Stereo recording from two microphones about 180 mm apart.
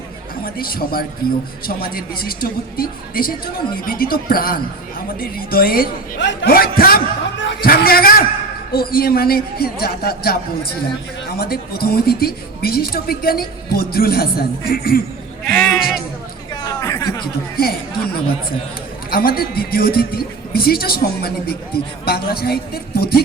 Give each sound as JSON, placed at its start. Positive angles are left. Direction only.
{"t": 0.4, "sound": "a woman's voice", "side_deg": 55}
{"t": 7.7, "sound": "a woman's voice", "side_deg": 55}
{"t": 15.4, "sound": "bleat", "side_deg": 5}
{"t": 16.6, "sound": "a sound", "side_deg": 20}
{"t": 17.6, "sound": "a woman's voice", "side_deg": 60}